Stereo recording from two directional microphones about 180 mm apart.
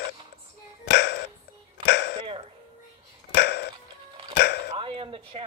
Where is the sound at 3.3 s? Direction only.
65° left (ahead or behind).